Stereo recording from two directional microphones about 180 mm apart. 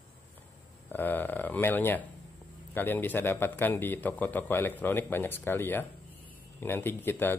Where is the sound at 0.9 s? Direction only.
10° left (ahead or behind).